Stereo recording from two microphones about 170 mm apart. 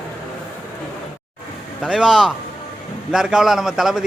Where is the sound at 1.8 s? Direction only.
5° right (ahead or behind).